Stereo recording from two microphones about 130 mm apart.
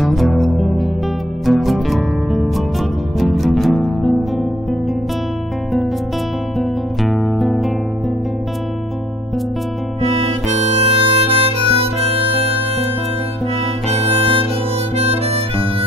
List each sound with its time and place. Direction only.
0.0 s music: centre (ahead or behind)
6.6 s guitar: centre (ahead or behind)
10.0 s harmonica: 45° right (ahead or behind)
13.9 s harmonica: 50° right (ahead or behind)